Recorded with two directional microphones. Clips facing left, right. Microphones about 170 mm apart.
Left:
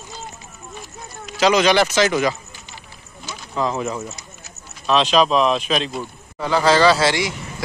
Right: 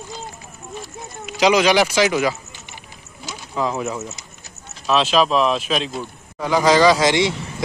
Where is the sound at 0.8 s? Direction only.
15° right (ahead or behind).